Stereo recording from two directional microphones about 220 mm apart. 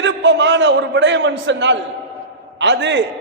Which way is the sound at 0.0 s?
55° right (ahead or behind).